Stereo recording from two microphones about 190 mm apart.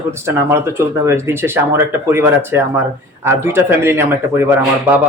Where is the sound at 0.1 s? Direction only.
15° right (ahead or behind).